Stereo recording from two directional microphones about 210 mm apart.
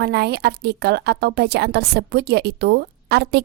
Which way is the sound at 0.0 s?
50° right (ahead or behind).